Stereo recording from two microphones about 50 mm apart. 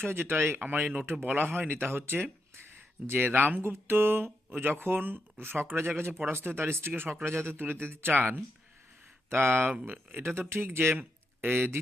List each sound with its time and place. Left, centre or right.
0.0 s speech: right
0.6 s speech: right
3.6 s speech: right